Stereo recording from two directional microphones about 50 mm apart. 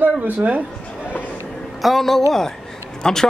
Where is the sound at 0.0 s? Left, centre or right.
Right.